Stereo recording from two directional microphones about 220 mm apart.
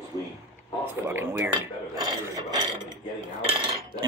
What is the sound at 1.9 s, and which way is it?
Filing, 20° right (ahead or behind).